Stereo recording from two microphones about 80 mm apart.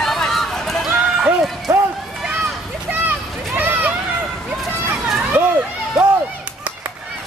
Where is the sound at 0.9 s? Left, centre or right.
Centre.